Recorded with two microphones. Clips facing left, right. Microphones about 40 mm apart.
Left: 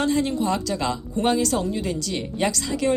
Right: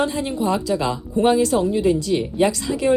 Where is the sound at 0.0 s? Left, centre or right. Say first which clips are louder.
Even; right.